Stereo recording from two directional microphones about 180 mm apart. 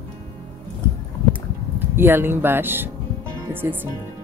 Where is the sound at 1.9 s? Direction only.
10° right (ahead or behind).